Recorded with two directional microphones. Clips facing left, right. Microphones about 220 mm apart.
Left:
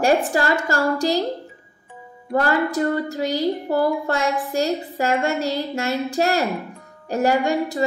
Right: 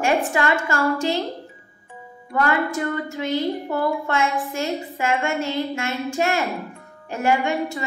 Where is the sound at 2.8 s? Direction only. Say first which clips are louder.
Left 4 dB; 30° left (ahead or behind).